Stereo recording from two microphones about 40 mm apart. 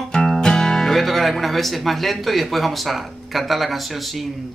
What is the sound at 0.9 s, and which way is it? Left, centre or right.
Speech, centre.